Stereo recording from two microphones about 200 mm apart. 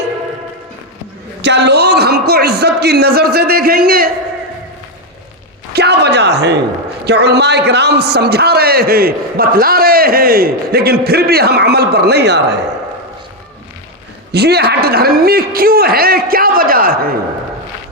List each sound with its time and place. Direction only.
1.4 s a man's voice: 60° right (ahead or behind)
5.7 s a sound: 55° right (ahead or behind)
7.0 s a man's voice: 55° right (ahead or behind)
14.3 s a man's voice: 55° right (ahead or behind)